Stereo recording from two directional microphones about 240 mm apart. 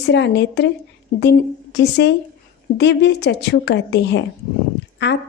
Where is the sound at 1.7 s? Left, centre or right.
Left.